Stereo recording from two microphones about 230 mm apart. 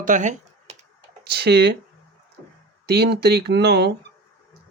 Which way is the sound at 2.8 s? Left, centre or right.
Right.